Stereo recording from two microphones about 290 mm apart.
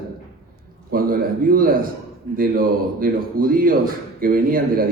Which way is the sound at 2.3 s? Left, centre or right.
Right.